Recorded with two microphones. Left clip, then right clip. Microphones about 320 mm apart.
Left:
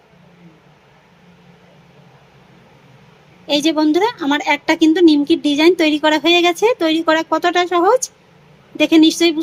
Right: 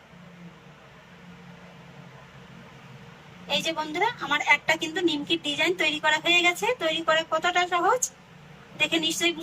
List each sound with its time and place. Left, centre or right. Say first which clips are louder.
3.6 s speech: left 12 dB; centre